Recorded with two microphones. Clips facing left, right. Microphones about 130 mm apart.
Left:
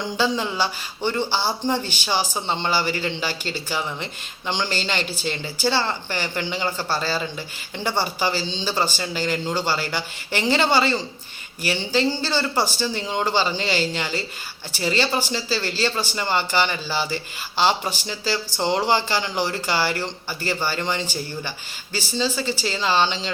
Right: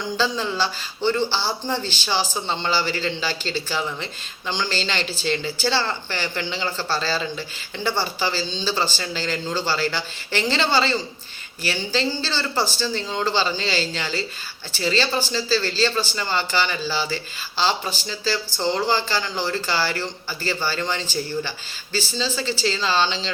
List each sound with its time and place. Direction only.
0.2 s speech: 15° left (ahead or behind)